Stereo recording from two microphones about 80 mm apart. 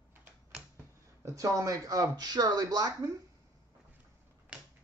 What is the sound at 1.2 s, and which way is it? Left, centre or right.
Speech, right.